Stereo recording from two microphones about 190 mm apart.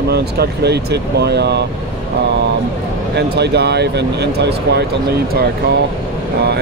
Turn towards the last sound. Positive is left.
turn(degrees=-60)  # may be behind; listen again after turning